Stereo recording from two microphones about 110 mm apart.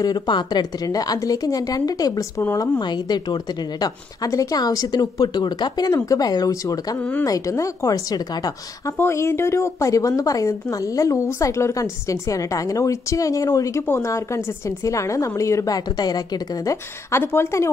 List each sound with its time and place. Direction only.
0.0 s a woman's voice: 40° left (ahead or behind)
17.2 s a woman's voice: 20° left (ahead or behind)